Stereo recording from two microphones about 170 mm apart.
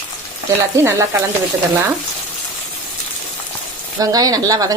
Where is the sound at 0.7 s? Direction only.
15° right (ahead or behind).